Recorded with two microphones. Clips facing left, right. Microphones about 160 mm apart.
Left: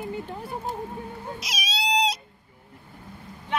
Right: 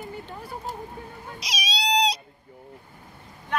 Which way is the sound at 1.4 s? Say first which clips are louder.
Right 3 dB; 5° left (ahead or behind).